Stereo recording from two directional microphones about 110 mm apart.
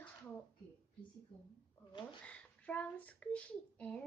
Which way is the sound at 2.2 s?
10° left (ahead or behind).